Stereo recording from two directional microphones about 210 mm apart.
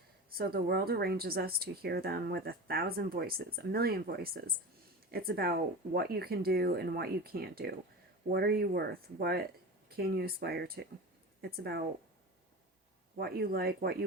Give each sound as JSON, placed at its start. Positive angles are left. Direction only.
{"t": 0.3, "sound": "speech", "side_deg": -45}
{"t": 13.1, "sound": "speech", "side_deg": -45}